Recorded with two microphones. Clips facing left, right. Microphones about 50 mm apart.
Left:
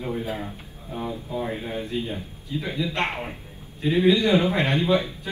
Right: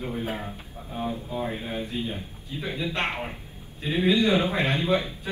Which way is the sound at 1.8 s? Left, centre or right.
Left.